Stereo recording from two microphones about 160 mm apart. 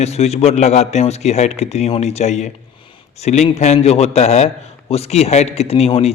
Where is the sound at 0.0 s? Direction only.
40° left (ahead or behind).